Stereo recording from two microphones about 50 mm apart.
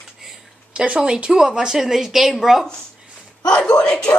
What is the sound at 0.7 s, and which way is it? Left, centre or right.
A woman's voice, right.